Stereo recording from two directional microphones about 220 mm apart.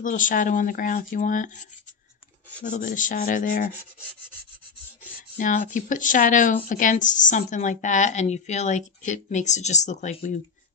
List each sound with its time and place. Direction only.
0.0 s speech: 35° left (ahead or behind)
5.4 s speech: 35° left (ahead or behind)